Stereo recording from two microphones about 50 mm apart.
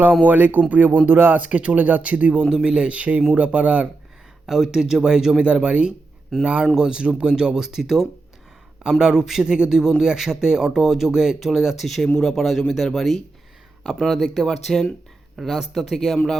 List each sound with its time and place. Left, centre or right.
0.3 s speech: right
1.4 s speech: right
2.4 s speech: centre
4.4 s speech: centre
15.4 s speech: centre